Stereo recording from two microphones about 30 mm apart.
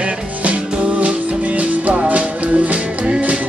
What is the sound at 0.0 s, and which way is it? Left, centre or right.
Music, right.